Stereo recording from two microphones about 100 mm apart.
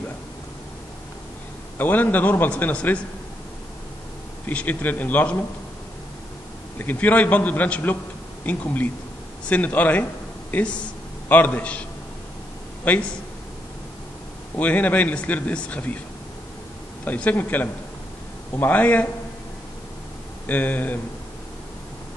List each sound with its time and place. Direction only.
1.8 s a man's voice: 20° left (ahead or behind)
4.5 s a man's voice: 15° left (ahead or behind)
6.8 s a man's voice: 20° left (ahead or behind)
11.2 s a man's voice: 15° left (ahead or behind)
12.8 s a man's voice: 15° left (ahead or behind)
14.5 s a man's voice: 15° left (ahead or behind)
17.0 s a man's voice: 15° left (ahead or behind)
20.4 s a man's voice: 20° left (ahead or behind)